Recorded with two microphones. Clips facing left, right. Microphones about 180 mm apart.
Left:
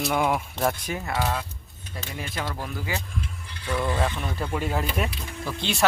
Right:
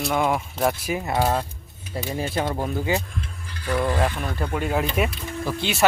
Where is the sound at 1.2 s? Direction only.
45° right (ahead or behind).